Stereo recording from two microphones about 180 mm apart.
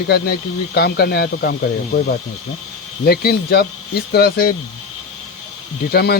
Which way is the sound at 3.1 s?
60° left (ahead or behind).